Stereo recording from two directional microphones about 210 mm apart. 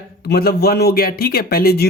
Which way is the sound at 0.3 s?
50° left (ahead or behind).